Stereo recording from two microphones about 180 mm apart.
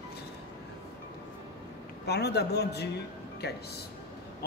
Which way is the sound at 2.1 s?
65° left (ahead or behind).